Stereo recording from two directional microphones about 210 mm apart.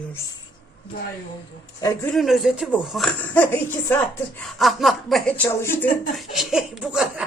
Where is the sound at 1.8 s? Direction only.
15° left (ahead or behind).